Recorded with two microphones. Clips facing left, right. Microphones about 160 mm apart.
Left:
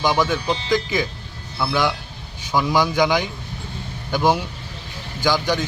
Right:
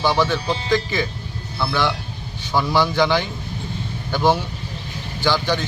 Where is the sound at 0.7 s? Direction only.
10° left (ahead or behind).